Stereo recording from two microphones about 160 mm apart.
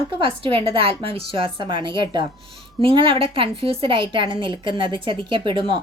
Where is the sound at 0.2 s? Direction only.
35° right (ahead or behind).